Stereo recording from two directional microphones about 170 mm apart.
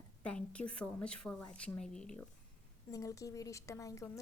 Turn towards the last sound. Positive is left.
turn(degrees=20)  # may be behind; listen again after turning